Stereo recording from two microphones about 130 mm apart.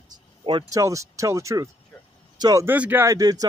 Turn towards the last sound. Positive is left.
turn(degrees=-30)  # may be behind; listen again after turning